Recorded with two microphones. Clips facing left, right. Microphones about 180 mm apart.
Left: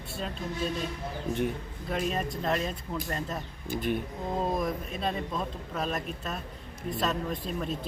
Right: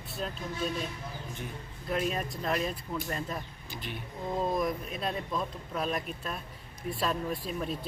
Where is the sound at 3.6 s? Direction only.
50° left (ahead or behind).